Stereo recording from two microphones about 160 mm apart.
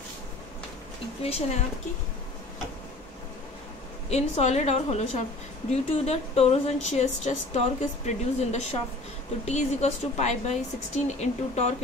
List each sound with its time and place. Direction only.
1.2 s speech: 40° left (ahead or behind)
4.1 s speech: 45° left (ahead or behind)